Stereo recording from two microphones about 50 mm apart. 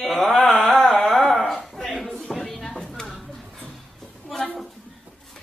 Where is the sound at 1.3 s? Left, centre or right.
Centre.